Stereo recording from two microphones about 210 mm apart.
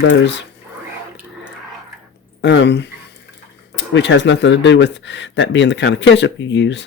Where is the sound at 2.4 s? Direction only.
55° left (ahead or behind).